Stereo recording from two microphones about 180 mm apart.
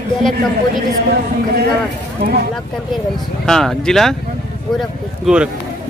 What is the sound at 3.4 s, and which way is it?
Speech, 5° left (ahead or behind).